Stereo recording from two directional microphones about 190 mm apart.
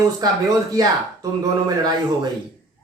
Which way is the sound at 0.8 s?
20° right (ahead or behind).